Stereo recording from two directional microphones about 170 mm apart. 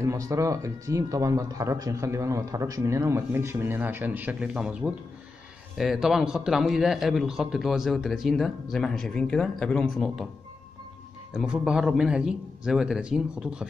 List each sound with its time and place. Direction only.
0.0 s a man's voice: 20° right (ahead or behind); by 10.2 s centre (ahead or behind)
11.3 s a man's voice: 5° right (ahead or behind)